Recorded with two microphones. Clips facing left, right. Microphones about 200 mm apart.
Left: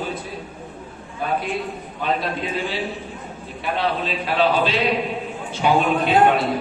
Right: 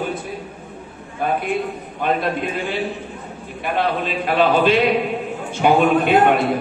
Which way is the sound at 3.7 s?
55° right (ahead or behind).